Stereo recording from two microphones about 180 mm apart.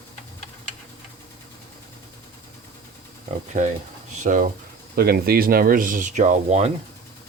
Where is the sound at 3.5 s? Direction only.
50° right (ahead or behind).